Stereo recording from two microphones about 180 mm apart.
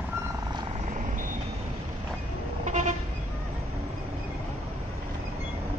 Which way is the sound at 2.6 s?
40° right (ahead or behind).